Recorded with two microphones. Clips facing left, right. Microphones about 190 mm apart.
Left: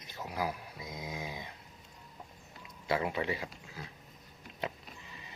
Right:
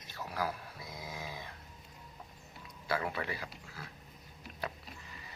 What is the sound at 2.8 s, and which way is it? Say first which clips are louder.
Speech: left 4 dB; 20° left (ahead or behind).